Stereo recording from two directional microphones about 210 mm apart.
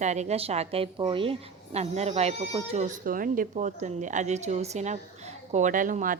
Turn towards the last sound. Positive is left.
turn(degrees=-40)  # may be behind; listen again after turning